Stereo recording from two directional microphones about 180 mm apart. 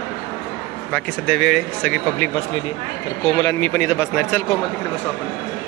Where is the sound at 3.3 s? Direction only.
20° left (ahead or behind).